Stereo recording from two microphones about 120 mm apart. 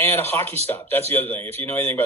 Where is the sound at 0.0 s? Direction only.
20° left (ahead or behind).